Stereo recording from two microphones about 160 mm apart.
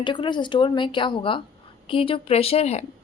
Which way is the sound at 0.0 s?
30° left (ahead or behind).